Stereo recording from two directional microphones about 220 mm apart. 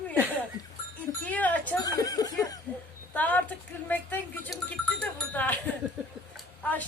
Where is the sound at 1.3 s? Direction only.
5° left (ahead or behind).